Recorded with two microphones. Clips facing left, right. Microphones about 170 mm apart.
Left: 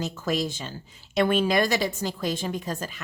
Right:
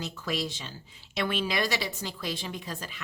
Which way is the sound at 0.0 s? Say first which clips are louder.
Left 5 dB; 45° left (ahead or behind).